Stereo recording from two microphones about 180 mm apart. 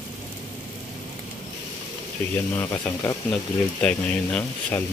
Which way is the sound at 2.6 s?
15° left (ahead or behind).